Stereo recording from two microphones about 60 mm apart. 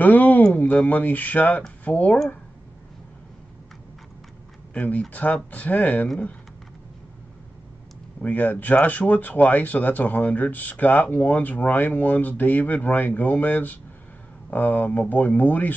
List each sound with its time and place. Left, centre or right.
0.0 s a sound: left
0.8 s speech: left
4.7 s speech: left
8.2 s speech: left